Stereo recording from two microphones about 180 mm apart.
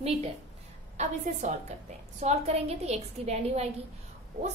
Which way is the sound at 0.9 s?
40° right (ahead or behind).